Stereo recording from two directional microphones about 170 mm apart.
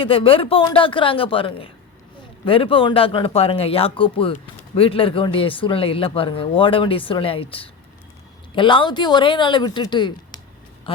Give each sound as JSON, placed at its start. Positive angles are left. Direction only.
{"t": 0.0, "sound": "speech", "side_deg": 30}